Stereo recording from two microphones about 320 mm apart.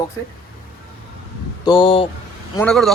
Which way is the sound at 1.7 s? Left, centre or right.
Centre.